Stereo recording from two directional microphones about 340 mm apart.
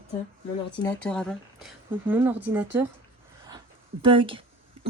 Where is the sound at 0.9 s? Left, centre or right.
Centre.